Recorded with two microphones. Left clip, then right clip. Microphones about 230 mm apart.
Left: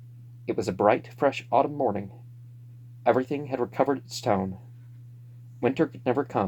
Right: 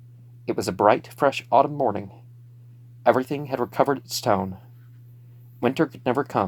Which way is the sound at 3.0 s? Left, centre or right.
Centre.